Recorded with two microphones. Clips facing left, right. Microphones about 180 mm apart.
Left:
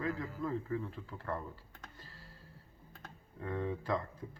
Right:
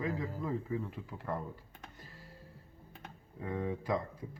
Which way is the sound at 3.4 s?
10° right (ahead or behind).